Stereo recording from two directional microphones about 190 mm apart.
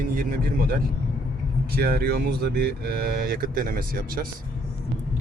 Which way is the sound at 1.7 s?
55° right (ahead or behind).